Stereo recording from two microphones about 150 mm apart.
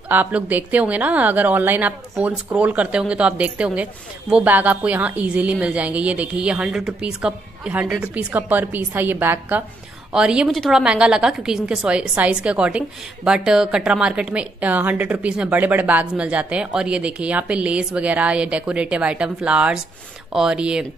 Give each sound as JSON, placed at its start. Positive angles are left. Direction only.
{"t": 0.1, "sound": "a woman's voice", "side_deg": -10}